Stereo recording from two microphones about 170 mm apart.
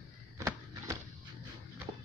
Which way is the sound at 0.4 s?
20° right (ahead or behind).